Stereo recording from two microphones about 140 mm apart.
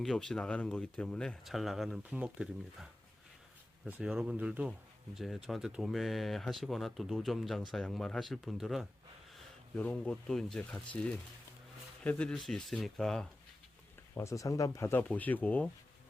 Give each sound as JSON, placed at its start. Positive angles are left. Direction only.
{"t": 0.0, "sound": "speech", "side_deg": 5}
{"t": 3.8, "sound": "speech", "side_deg": -10}
{"t": 12.0, "sound": "speech", "side_deg": 10}
{"t": 14.2, "sound": "speech", "side_deg": 20}